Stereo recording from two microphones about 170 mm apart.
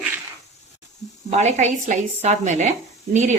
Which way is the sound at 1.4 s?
45° right (ahead or behind).